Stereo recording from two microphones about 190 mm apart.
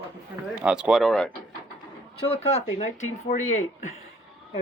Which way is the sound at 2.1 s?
30° left (ahead or behind).